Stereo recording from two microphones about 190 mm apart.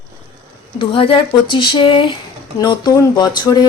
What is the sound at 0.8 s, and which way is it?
Speech, 25° left (ahead or behind).